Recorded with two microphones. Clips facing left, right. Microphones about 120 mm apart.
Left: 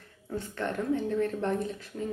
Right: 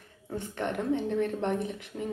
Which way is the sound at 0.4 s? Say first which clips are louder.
Right 1 dB; 20° right (ahead or behind).